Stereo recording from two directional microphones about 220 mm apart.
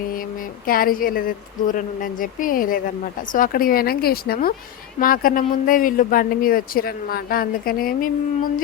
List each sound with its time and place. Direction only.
0.7 s speech: 40° left (ahead or behind)